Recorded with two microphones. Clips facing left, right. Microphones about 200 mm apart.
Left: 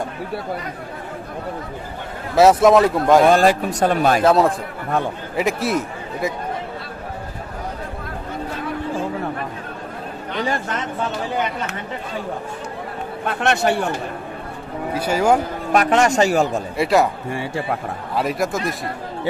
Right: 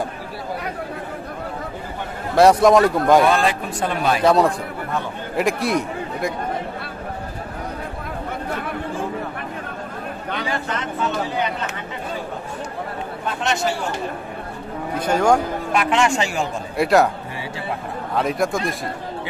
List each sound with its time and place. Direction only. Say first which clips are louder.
2.3 s speech: left 1 dB; 5° left (ahead or behind)
3.3 s speech: left 4 dB; 40° left (ahead or behind)
4.2 s a man's voice: left 1 dB; centre (ahead or behind)
13.3 s speech: left 4 dB; 60° left (ahead or behind)
15.0 s speech: even; 5° left (ahead or behind)
15.7 s a man's voice: left 4 dB; 40° left (ahead or behind)
16.7 s speech: right 2 dB; centre (ahead or behind)
18.1 s speech: right 1 dB; centre (ahead or behind)